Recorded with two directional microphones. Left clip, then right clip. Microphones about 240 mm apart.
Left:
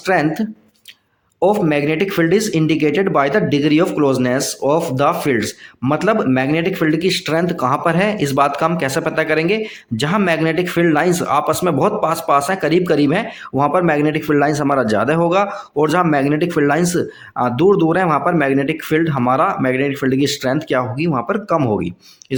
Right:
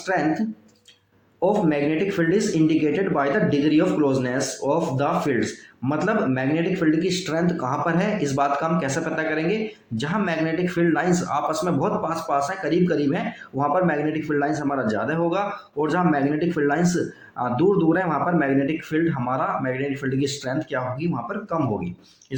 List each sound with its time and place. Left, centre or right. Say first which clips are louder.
0.0 s speech: left 6 dB; left